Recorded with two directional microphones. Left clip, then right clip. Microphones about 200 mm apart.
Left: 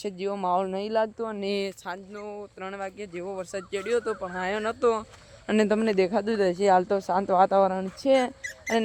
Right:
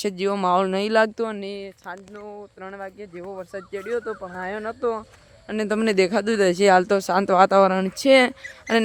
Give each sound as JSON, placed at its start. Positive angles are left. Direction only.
{"t": 0.0, "sound": "speech", "side_deg": -25}
{"t": 2.1, "sound": "speech", "side_deg": 0}
{"t": 5.5, "sound": "a man's voice", "side_deg": 45}
{"t": 5.8, "sound": "speech", "side_deg": -15}